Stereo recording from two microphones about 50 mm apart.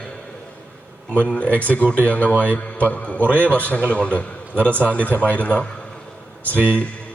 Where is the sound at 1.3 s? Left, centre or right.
Left.